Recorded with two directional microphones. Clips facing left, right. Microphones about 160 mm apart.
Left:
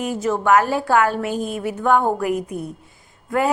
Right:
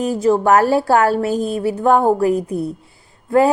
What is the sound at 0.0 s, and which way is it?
A woman's voice, 35° right (ahead or behind).